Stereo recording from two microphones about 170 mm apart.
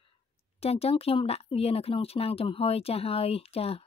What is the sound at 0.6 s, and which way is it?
Speech, 35° left (ahead or behind).